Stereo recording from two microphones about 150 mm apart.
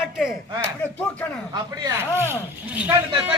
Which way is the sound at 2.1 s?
15° right (ahead or behind).